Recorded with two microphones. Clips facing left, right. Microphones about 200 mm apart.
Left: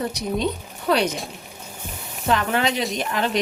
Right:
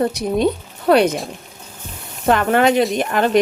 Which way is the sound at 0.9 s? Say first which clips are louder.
Right 7 dB; 55° right (ahead or behind).